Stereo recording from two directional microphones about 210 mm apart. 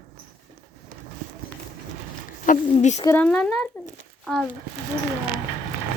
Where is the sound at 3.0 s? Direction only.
5° left (ahead or behind).